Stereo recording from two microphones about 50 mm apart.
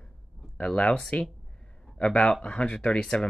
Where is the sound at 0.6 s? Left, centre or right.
Centre.